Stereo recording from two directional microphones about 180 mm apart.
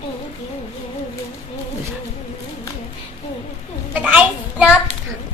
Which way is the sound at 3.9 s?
10° right (ahead or behind).